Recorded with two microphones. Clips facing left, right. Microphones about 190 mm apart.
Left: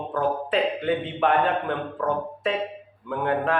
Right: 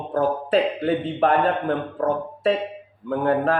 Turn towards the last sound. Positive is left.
turn(degrees=-40)  # may be behind; listen again after turning